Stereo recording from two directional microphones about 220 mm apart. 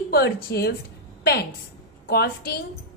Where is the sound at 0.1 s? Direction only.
45° left (ahead or behind).